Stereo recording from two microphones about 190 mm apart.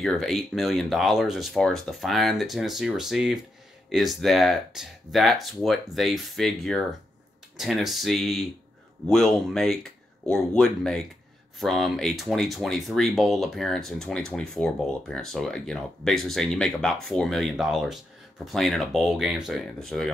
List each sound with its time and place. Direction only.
0.0 s speech: centre (ahead or behind)